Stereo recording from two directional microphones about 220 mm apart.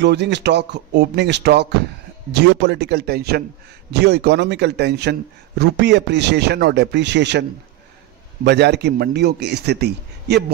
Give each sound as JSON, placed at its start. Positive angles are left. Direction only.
{"t": 0.0, "sound": "a man's voice", "side_deg": -50}
{"t": 8.5, "sound": "a man's voice", "side_deg": -50}